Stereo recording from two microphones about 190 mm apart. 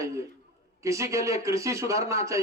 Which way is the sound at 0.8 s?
15° right (ahead or behind).